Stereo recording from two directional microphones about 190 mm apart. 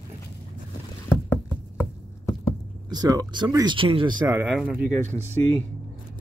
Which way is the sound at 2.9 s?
20° right (ahead or behind).